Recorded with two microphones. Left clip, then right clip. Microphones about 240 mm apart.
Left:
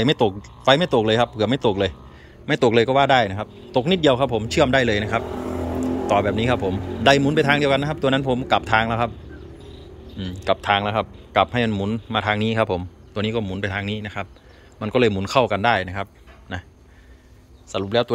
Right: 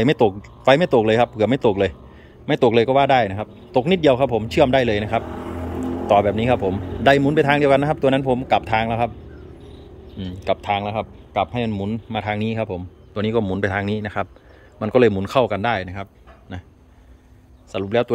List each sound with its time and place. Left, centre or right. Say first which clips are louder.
0.0 s a man's voice: right 2 dB; centre
10.1 s speech: left 1 dB; centre
13.2 s a man's voice: right 4 dB; centre
17.6 s a man's voice: right 1 dB; centre